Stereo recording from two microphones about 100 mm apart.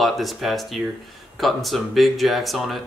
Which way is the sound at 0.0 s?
Centre (ahead or behind).